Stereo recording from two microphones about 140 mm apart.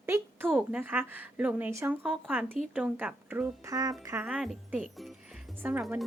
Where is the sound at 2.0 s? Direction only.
10° right (ahead or behind).